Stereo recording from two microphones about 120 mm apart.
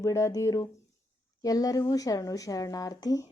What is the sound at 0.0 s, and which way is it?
Speech, 25° left (ahead or behind).